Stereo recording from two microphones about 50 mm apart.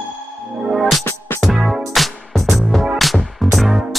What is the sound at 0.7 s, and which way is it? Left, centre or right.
Music, centre.